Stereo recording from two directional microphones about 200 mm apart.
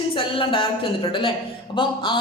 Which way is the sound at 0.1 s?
25° left (ahead or behind).